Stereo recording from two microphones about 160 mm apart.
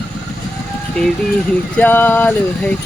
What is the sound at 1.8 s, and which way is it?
Vehicle, 10° left (ahead or behind).